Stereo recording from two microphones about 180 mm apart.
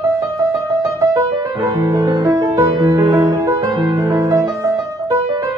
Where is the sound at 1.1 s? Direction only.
20° right (ahead or behind).